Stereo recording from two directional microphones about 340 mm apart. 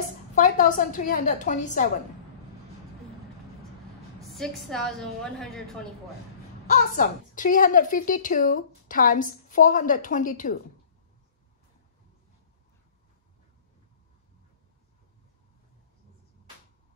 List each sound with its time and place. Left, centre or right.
0.4 s a woman's voice: left
4.3 s a woman's voice: centre
6.7 s a woman's voice: left